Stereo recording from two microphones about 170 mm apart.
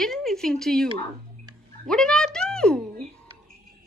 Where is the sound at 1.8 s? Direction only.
5° left (ahead or behind).